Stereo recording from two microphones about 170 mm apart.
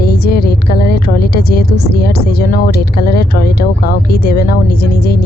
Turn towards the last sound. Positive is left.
turn(degrees=65)  # may be behind; listen again after turning